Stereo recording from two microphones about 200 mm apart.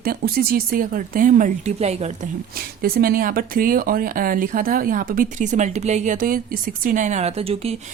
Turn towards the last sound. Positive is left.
turn(degrees=-30)  # may be behind; listen again after turning